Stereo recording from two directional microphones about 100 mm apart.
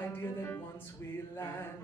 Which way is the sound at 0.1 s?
20° left (ahead or behind).